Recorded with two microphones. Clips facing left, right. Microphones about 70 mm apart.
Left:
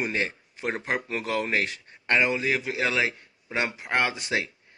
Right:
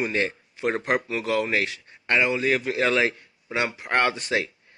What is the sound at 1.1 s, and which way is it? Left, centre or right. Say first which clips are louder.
Speech: right 3 dB; left.